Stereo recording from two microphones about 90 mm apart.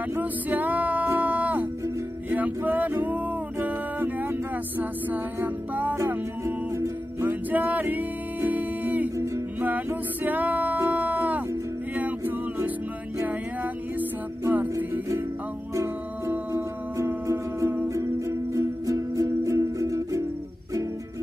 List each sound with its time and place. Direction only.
0.1 s music: 20° right (ahead or behind)
6.4 s music: 35° right (ahead or behind)
7.2 s music: 20° right (ahead or behind)
14.5 s music: 20° right (ahead or behind)
15.7 s music: 30° right (ahead or behind)